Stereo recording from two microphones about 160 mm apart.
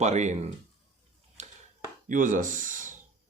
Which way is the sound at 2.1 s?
55° right (ahead or behind).